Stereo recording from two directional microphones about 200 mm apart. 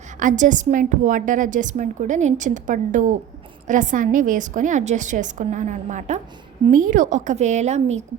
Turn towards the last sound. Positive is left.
turn(degrees=-35)  # may be behind; listen again after turning